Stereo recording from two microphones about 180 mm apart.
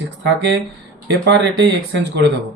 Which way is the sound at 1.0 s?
65° right (ahead or behind).